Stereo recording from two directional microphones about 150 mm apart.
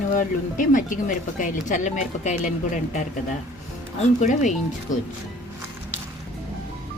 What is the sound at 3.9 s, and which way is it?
Speech, 55° left (ahead or behind).